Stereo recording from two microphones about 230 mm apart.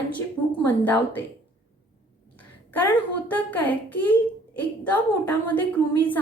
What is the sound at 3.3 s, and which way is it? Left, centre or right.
Speech, centre.